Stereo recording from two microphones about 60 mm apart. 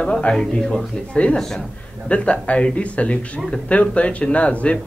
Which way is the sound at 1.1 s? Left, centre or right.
Centre.